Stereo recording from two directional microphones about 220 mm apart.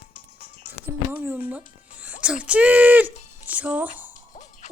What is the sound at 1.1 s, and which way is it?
Speech, 10° right (ahead or behind).